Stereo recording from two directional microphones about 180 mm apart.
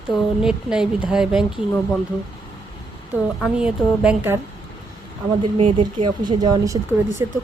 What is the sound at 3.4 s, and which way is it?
Speech, 5° right (ahead or behind).